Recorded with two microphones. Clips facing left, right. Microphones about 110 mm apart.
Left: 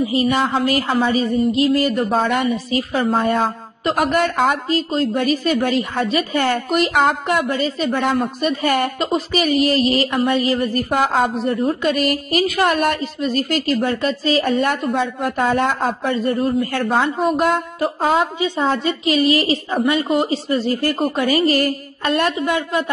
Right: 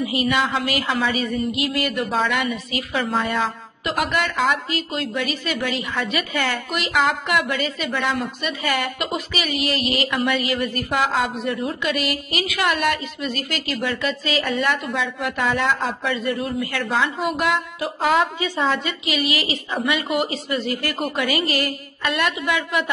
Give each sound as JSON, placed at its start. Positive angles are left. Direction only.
{"t": 0.0, "sound": "a woman's voice", "side_deg": 35}
{"t": 2.0, "sound": "a woman's voice", "side_deg": 45}
{"t": 18.0, "sound": "a woman's voice", "side_deg": 25}
{"t": 18.7, "sound": "a woman's voice", "side_deg": 45}